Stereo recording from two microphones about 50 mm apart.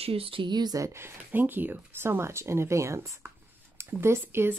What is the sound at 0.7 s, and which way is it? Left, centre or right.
Speech, right.